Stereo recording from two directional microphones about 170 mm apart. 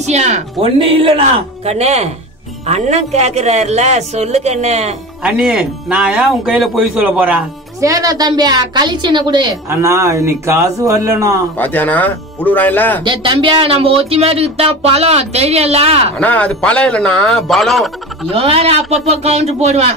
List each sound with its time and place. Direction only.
0.0 s speech: 40° right (ahead or behind)
5.2 s speech: 5° right (ahead or behind)
7.8 s a woman's voice: 20° right (ahead or behind)
11.5 s a man's voice: 10° left (ahead or behind)
13.0 s speech: 30° right (ahead or behind)
16.2 s a man's voice: 10° left (ahead or behind)
18.3 s speech: 35° right (ahead or behind)